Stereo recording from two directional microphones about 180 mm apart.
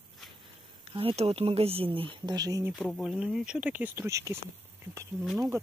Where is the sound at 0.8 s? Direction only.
30° right (ahead or behind).